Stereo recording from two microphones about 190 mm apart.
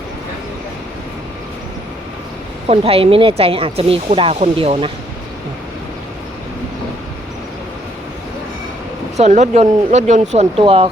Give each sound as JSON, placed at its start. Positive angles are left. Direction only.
{"t": 2.6, "sound": "speech", "side_deg": -30}
{"t": 9.1, "sound": "speech", "side_deg": -35}